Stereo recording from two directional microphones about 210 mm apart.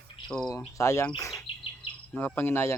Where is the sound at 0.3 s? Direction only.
15° left (ahead or behind).